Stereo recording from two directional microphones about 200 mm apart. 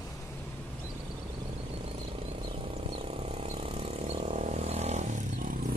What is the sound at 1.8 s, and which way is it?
Vehicle, 30° right (ahead or behind).